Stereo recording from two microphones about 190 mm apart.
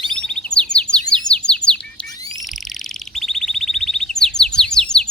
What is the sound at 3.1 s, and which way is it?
Chirp, centre (ahead or behind).